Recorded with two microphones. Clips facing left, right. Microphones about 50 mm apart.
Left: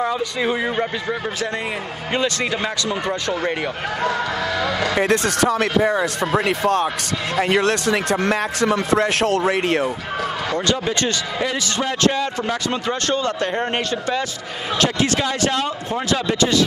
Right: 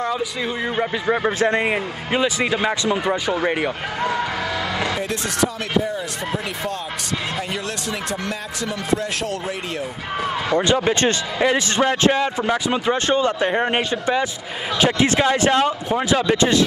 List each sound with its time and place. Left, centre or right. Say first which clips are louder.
0.0 s a man's voice: left 1 dB; centre
1.0 s speech: right 5 dB; right
2.1 s a man's voice: right 2 dB; centre
4.9 s speech: left 6 dB; left
10.5 s a man's voice: right 5 dB; right